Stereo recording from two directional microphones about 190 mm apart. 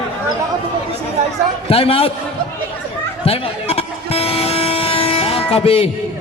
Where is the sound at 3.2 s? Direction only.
30° left (ahead or behind).